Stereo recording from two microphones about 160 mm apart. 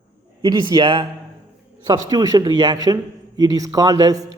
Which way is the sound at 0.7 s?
30° right (ahead or behind).